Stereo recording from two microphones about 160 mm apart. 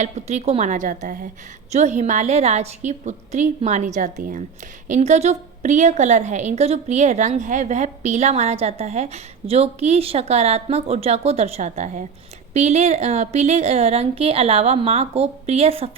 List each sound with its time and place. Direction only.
0.0 s a woman's voice: 45° right (ahead or behind)
1.7 s a woman's voice: 45° right (ahead or behind)
4.9 s a woman's voice: 45° right (ahead or behind)